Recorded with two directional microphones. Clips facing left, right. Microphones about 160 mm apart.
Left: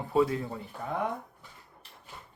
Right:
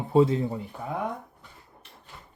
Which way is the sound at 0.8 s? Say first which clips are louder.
Left 1 dB; 5° right (ahead or behind).